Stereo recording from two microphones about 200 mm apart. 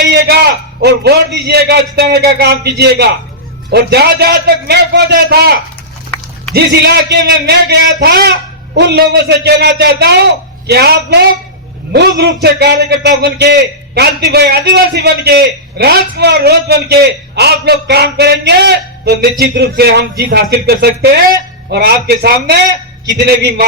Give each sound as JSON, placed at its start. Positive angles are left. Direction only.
{"t": 0.0, "sound": "a man's voice", "side_deg": -55}
{"t": 6.1, "sound": "a sound", "side_deg": 5}
{"t": 6.5, "sound": "a man's voice", "side_deg": -60}